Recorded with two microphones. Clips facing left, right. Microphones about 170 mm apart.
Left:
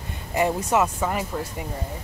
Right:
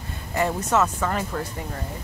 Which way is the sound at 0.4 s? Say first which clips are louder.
Left 1 dB; 15° left (ahead or behind).